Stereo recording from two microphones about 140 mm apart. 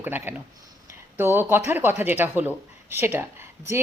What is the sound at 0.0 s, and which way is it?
Speech, 15° right (ahead or behind).